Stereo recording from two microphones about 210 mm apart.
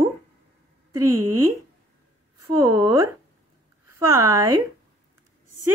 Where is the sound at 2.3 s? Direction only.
15° right (ahead or behind).